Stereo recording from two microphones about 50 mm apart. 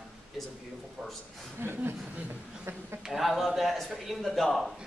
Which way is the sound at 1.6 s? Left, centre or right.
Right.